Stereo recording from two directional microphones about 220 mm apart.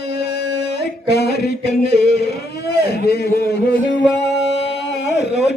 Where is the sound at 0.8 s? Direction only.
50° left (ahead or behind).